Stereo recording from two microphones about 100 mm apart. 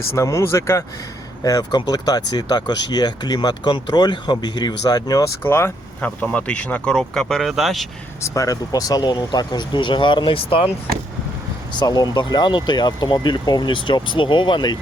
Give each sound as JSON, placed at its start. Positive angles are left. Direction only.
{"t": 0.1, "sound": "speech", "side_deg": 30}
{"t": 5.4, "sound": "speech", "side_deg": 25}
{"t": 6.0, "sound": "speech", "side_deg": 10}
{"t": 8.2, "sound": "speech", "side_deg": 30}
{"t": 11.8, "sound": "speech", "side_deg": 45}